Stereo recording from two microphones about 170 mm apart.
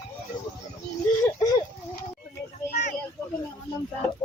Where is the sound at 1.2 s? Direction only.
25° left (ahead or behind).